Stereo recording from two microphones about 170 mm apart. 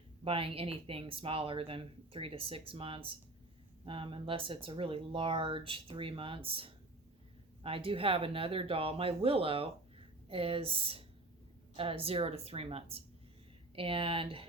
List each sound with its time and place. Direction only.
0.3 s speech: 35° right (ahead or behind)